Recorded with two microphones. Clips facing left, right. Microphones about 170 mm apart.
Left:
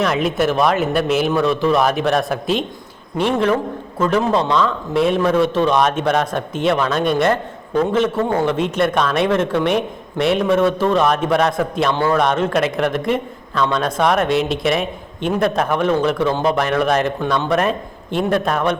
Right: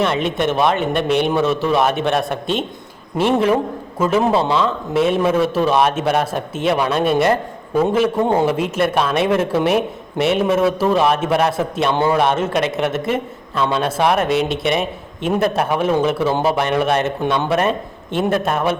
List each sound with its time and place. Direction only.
0.0 s a man's voice: centre (ahead or behind)
11.9 s a man's voice: 15° right (ahead or behind)
12.2 s a man's voice: 5° right (ahead or behind)